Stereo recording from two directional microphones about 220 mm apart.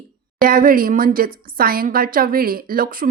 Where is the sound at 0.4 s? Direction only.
40° right (ahead or behind).